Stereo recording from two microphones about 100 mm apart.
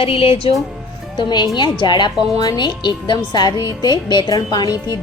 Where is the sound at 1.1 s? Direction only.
45° left (ahead or behind).